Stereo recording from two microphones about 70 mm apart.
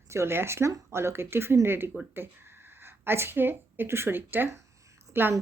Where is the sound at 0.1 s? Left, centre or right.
Right.